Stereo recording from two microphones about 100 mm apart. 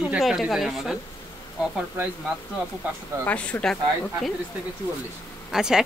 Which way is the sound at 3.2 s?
15° left (ahead or behind).